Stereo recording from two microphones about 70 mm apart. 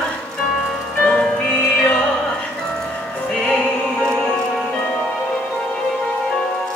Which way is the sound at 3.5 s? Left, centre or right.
Centre.